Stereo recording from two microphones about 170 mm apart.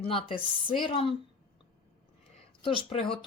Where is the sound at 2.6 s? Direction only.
30° left (ahead or behind).